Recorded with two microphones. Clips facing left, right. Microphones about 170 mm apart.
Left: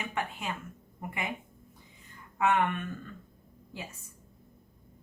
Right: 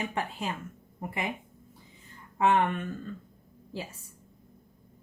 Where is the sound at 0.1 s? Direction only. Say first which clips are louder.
Right 2 dB; 35° right (ahead or behind).